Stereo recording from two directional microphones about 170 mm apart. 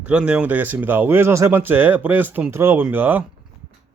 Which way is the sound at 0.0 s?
5° right (ahead or behind).